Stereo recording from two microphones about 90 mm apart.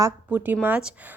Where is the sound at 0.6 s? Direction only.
15° right (ahead or behind).